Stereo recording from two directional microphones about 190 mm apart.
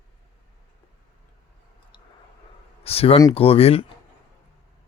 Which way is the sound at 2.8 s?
30° left (ahead or behind).